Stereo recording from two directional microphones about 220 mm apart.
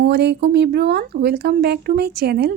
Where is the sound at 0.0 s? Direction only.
50° right (ahead or behind).